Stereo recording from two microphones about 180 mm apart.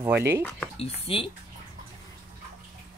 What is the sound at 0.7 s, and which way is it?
Speech, 30° left (ahead or behind).